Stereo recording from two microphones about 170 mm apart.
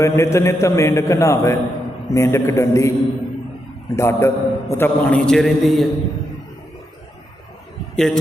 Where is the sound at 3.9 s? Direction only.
15° left (ahead or behind).